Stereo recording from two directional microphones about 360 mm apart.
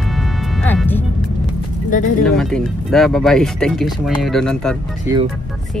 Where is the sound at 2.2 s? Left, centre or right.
Centre.